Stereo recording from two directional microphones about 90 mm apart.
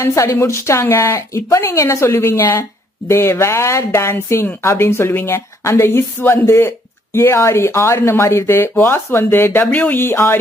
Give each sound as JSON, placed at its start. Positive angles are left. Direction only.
{"t": 0.0, "sound": "a woman's voice", "side_deg": 35}